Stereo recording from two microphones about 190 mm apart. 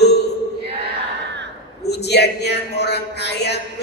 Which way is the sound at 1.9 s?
60° left (ahead or behind).